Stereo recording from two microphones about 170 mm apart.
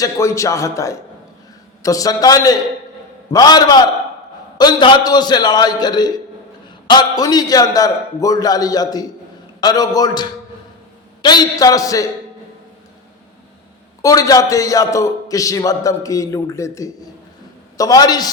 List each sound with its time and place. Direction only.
0.0 s a man's voice: 15° left (ahead or behind)
14.0 s a man's voice: 20° left (ahead or behind)